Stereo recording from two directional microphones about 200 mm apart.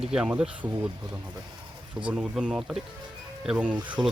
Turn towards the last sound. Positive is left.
turn(degrees=-5)  # may be behind; listen again after turning